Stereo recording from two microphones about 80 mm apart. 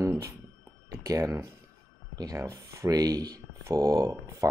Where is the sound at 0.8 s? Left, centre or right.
Right.